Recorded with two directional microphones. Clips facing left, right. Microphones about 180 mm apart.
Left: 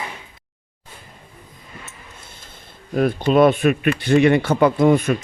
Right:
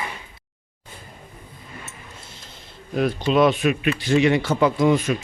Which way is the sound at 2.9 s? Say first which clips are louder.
Left 3 dB; 50° left (ahead or behind).